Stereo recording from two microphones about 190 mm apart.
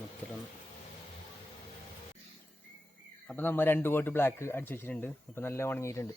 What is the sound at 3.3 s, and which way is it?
A man's voice, 10° left (ahead or behind).